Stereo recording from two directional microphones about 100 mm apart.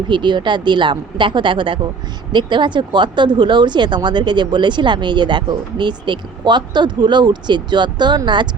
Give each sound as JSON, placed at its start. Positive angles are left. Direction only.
{"t": 0.1, "sound": "speech", "side_deg": -50}